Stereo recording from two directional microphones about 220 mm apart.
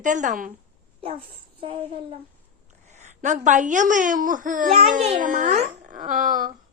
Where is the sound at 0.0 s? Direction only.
35° right (ahead or behind).